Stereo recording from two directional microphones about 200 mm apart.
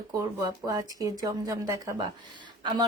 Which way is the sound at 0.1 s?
20° right (ahead or behind).